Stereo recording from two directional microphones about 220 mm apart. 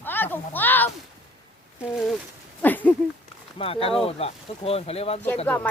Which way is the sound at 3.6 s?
25° left (ahead or behind).